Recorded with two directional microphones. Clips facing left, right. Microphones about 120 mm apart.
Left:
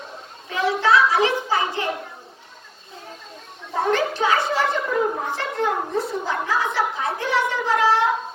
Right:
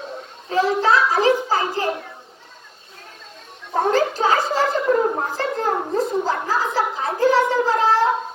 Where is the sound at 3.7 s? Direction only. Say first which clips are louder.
Right 3 dB; 35° right (ahead or behind).